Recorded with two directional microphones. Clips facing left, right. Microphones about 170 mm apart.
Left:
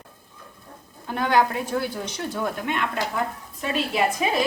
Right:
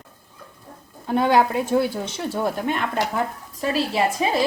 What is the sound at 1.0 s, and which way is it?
A woman's voice, 25° right (ahead or behind).